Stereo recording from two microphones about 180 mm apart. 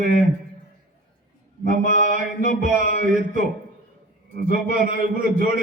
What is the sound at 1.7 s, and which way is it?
Mantra, 45° right (ahead or behind).